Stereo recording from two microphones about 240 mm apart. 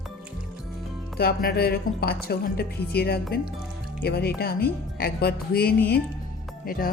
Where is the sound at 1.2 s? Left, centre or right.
Left.